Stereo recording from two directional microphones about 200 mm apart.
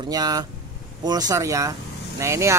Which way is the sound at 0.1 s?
20° right (ahead or behind).